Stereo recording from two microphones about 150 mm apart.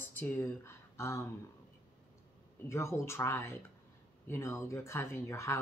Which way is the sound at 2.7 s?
20° left (ahead or behind).